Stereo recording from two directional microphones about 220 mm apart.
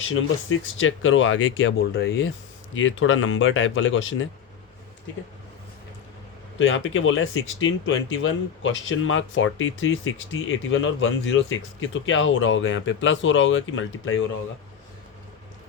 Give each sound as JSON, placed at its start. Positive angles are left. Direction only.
{"t": 0.1, "sound": "speech", "side_deg": 65}
{"t": 6.6, "sound": "speech", "side_deg": 60}